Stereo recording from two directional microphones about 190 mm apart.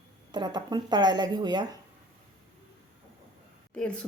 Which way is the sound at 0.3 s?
25° right (ahead or behind).